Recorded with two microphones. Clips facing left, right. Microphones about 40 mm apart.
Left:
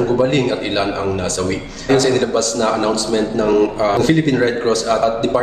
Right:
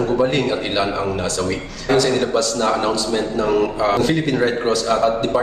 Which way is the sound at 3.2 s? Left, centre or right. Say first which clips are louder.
Left 5 dB; centre.